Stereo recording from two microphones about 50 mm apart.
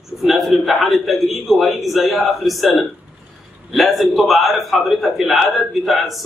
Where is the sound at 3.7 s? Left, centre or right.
Centre.